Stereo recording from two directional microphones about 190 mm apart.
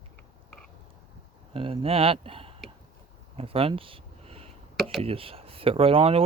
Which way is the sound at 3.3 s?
30° right (ahead or behind).